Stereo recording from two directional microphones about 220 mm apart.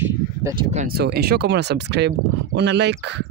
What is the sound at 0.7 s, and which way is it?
Speech, 45° right (ahead or behind).